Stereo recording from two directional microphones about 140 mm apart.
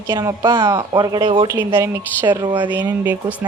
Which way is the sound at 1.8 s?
20° right (ahead or behind).